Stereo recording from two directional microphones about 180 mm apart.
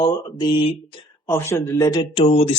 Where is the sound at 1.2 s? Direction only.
15° left (ahead or behind); by 2.5 s 35° left (ahead or behind).